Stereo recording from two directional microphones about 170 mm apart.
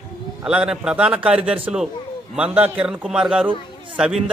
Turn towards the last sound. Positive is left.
turn(degrees=0)  # may be behind; listen again after turning